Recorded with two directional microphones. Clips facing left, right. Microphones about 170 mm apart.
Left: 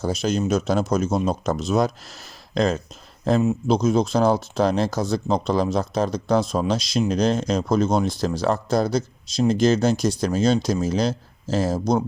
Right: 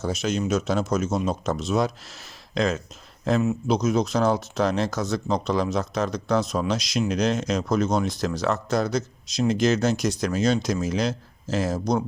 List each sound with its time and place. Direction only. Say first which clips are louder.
0.0 s speech: left 3 dB; 35° left (ahead or behind)